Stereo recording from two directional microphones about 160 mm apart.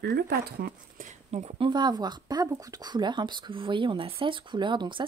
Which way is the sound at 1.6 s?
25° right (ahead or behind).